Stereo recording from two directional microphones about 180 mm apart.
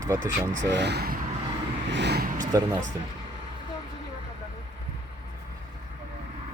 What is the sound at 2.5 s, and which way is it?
Speech, 20° right (ahead or behind).